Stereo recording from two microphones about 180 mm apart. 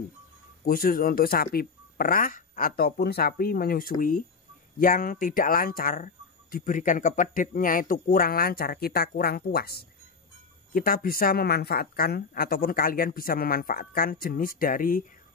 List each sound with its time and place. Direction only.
0.7 s speech: 50° left (ahead or behind)